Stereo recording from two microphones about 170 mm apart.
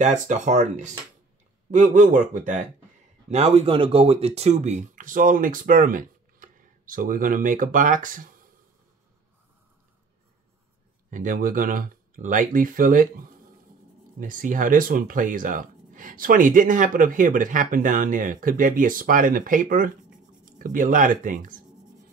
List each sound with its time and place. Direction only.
0.0 s speech: 45° right (ahead or behind)
3.3 s speech: 40° right (ahead or behind)
11.1 s speech: 50° right (ahead or behind)
14.2 s speech: 55° right (ahead or behind)